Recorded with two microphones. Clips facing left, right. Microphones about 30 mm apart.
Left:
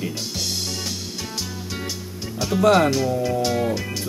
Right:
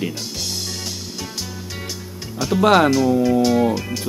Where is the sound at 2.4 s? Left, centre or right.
Centre.